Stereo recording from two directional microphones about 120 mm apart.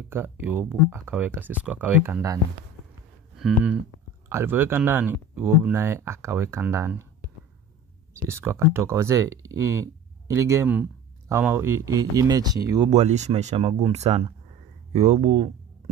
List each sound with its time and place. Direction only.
0.1 s speech: 20° right (ahead or behind)
3.3 s speech: 5° right (ahead or behind)
4.3 s speech: 20° right (ahead or behind)
8.3 s speech: 20° right (ahead or behind)
12.9 s speech: 70° right (ahead or behind); by 15.5 s 55° right (ahead or behind)